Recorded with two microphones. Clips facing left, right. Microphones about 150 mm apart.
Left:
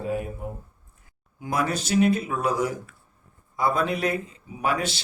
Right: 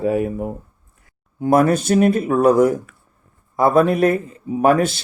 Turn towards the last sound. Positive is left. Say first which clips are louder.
# right 11 dB
turn(degrees=-50)  # may be behind; listen again after turning